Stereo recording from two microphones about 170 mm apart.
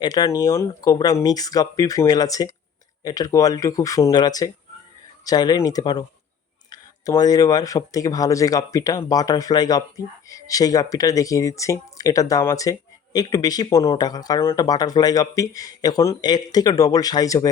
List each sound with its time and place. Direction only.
0.0 s speech: 25° left (ahead or behind)